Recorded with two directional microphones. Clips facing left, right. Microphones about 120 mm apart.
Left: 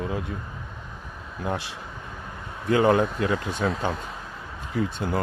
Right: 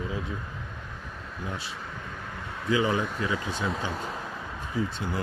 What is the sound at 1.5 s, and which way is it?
Speech, 65° left (ahead or behind).